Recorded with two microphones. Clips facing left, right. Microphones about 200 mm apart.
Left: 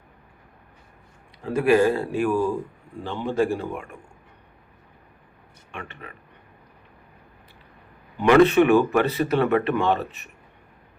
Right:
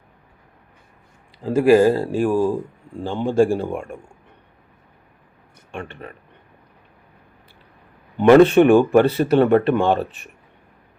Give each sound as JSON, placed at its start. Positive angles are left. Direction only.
{"t": 1.4, "sound": "speech", "side_deg": -30}
{"t": 5.8, "sound": "speech", "side_deg": -30}
{"t": 8.3, "sound": "speech", "side_deg": -30}